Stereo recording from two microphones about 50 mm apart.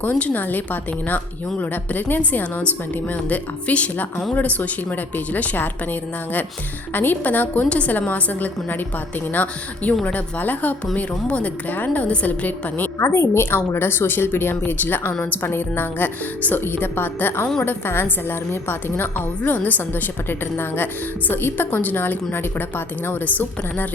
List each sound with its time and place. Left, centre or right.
0.0 s a woman's voice: left
13.0 s a woman's voice: left